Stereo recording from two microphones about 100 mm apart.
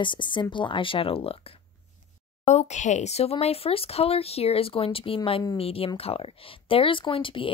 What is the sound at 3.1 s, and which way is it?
A woman's voice, 90° left.